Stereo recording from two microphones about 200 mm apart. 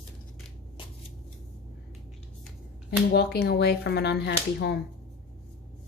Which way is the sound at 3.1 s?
55° left (ahead or behind).